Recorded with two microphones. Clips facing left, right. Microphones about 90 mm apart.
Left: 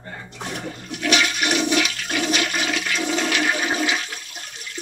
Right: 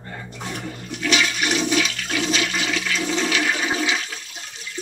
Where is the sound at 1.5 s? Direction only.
60° left (ahead or behind).